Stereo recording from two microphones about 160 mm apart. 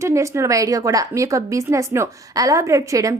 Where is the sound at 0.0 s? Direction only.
20° right (ahead or behind).